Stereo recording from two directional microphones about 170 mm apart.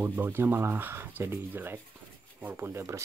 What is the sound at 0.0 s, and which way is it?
Speech, 15° right (ahead or behind).